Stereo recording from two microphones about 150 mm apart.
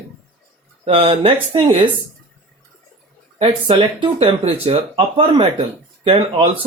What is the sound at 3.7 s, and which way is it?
Speech, 35° right (ahead or behind).